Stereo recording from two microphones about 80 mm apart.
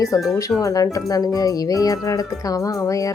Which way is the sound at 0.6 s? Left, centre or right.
Left.